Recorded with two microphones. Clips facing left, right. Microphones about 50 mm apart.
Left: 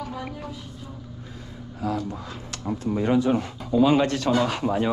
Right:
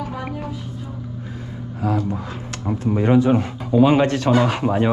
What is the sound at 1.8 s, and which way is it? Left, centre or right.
Speech, right.